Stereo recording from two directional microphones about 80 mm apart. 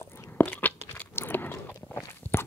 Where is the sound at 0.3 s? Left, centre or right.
Left.